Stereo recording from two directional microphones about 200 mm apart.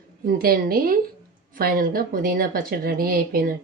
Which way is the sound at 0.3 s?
45° right (ahead or behind).